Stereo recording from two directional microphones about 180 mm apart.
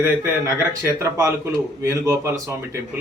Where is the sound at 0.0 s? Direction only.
15° right (ahead or behind).